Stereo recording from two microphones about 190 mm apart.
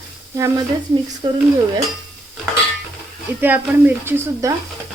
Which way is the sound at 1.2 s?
25° right (ahead or behind).